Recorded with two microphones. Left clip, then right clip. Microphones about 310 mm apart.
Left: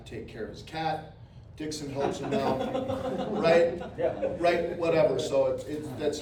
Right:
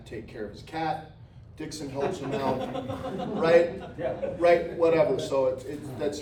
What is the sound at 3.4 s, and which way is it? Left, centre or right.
A man's voice, right.